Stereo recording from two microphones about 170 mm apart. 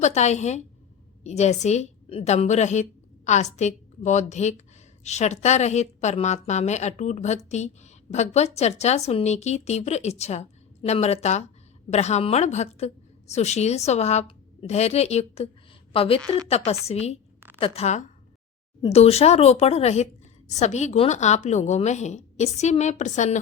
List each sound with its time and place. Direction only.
0.0 s a woman's voice: 40° left (ahead or behind)